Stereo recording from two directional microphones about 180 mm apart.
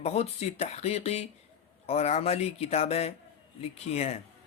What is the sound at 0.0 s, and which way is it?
Speech, 35° left (ahead or behind).